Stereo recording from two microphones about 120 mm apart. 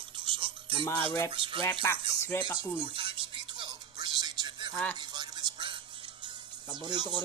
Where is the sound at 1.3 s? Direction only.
45° right (ahead or behind).